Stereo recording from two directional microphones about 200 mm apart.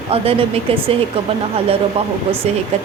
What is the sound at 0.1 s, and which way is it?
Speech, 30° right (ahead or behind).